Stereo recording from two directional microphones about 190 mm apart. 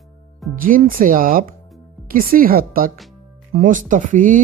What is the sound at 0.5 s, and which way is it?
Speech, 45° right (ahead or behind).